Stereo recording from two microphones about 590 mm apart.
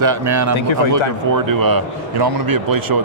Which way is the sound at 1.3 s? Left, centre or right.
Right.